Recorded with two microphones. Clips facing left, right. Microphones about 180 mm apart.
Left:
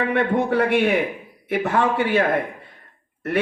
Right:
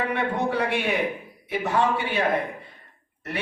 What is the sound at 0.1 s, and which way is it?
Speech, 55° left (ahead or behind).